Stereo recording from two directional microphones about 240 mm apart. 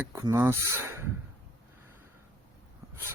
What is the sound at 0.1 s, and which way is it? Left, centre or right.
Speech, centre.